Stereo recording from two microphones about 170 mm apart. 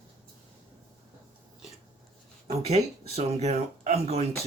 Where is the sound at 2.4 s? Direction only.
40° right (ahead or behind).